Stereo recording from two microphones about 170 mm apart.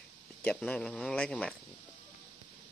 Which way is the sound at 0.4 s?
5° left (ahead or behind).